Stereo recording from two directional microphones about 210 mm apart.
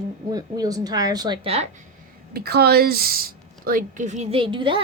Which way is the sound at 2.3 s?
50° right (ahead or behind).